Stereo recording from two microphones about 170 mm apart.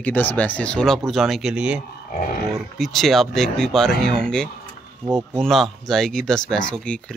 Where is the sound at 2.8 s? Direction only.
Centre (ahead or behind).